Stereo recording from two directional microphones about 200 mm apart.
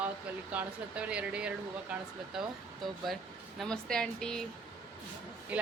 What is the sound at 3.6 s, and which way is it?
Speech, centre (ahead or behind).